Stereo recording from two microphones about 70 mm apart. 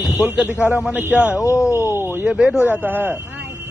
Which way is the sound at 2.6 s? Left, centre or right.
Right.